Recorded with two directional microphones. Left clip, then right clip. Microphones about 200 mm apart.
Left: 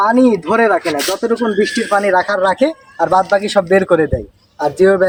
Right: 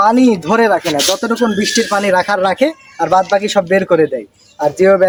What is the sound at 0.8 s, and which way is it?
Speech, 45° right (ahead or behind).